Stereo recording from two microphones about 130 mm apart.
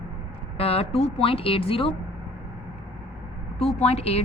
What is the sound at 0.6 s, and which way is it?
A woman's voice, 50° left (ahead or behind).